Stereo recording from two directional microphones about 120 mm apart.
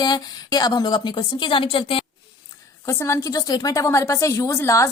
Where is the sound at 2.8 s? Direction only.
25° left (ahead or behind).